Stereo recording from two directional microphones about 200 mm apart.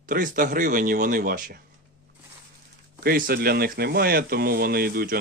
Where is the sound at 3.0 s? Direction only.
50° right (ahead or behind).